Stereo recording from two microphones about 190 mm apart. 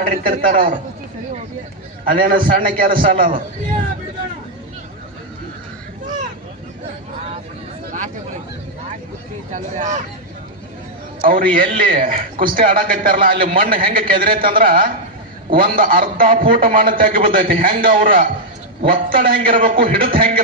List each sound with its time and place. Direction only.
0.0 s a man's voice: 45° right (ahead or behind)
2.0 s a man's voice: 50° right (ahead or behind)
7.9 s a sound: 40° right (ahead or behind)
9.5 s speech: 40° right (ahead or behind)
11.1 s a man's voice: 45° right (ahead or behind)